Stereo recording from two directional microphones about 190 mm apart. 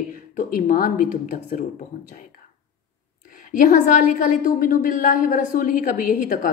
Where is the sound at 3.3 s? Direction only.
50° left (ahead or behind).